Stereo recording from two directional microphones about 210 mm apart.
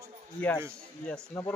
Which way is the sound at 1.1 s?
5° left (ahead or behind).